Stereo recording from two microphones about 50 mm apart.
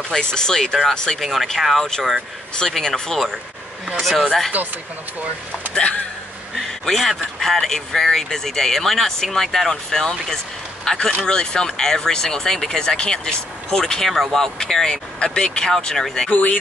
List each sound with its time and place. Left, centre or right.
0.1 s speech: centre
1.2 s speech: centre
6.5 s speech: centre
16.3 s speech: left